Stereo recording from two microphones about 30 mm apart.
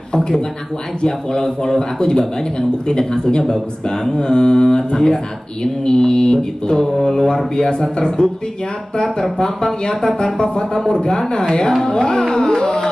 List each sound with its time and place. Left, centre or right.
1.0 s speech: left
7.8 s speech: left
9.8 s speech: left
12.3 s music: centre